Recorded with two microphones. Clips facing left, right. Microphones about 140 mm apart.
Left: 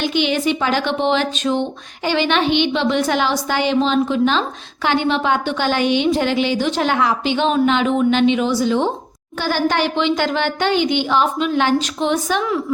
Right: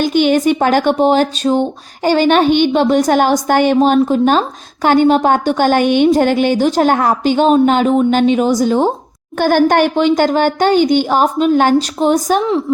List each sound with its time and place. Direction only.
0.0 s a woman's voice: 45° right (ahead or behind); by 12.6 s 30° right (ahead or behind)